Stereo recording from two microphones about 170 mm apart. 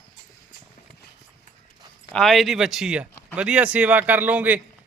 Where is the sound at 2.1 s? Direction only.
Centre (ahead or behind).